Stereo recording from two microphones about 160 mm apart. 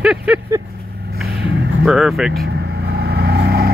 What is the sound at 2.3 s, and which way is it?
Vehicle, 90° right.